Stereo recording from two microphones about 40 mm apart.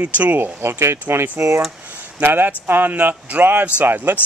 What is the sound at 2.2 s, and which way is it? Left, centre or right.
Speech, right.